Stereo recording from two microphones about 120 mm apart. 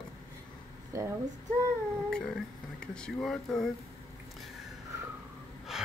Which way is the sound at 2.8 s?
5° left (ahead or behind).